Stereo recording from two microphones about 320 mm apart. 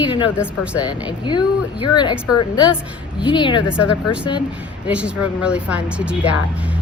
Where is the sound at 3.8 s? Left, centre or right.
Left.